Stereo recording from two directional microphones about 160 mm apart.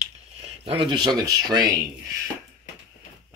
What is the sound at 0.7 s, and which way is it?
Speech, 35° right (ahead or behind).